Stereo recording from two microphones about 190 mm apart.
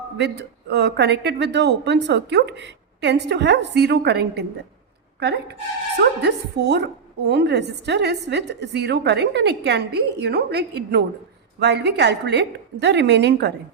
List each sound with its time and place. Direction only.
0.2 s a woman's voice: 65° right (ahead or behind)
6.2 s a woman's voice: 65° right (ahead or behind)